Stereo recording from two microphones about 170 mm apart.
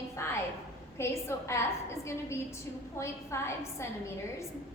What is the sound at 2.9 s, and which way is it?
A woman's voice, 15° left (ahead or behind).